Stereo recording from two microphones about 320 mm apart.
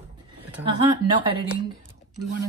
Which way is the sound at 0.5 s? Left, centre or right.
Centre.